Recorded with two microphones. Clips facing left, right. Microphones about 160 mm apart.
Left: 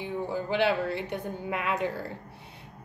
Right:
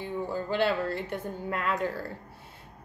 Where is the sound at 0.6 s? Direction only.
15° left (ahead or behind).